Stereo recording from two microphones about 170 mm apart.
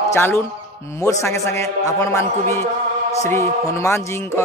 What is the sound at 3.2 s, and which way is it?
Music, 15° left (ahead or behind).